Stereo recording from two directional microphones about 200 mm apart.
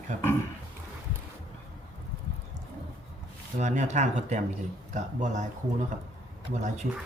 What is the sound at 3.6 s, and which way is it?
Speech, 35° right (ahead or behind).